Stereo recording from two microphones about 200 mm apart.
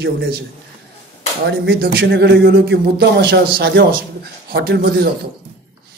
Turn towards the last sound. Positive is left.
turn(degrees=-55)  # may be behind; listen again after turning